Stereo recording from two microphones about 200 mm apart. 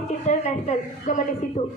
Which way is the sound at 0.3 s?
35° left (ahead or behind).